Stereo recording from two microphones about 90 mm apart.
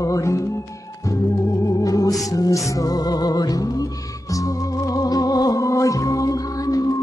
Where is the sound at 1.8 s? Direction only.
40° left (ahead or behind).